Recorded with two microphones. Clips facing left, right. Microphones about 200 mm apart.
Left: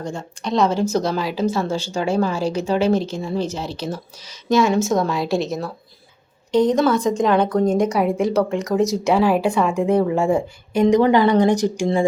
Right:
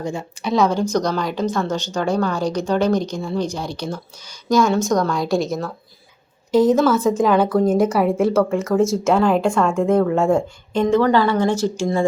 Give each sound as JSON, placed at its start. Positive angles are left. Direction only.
{"t": 0.0, "sound": "speech", "side_deg": -10}
{"t": 10.8, "sound": "a woman's voice", "side_deg": 15}